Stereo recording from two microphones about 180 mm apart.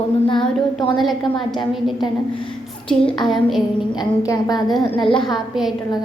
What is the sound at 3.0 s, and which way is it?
Speech, centre (ahead or behind).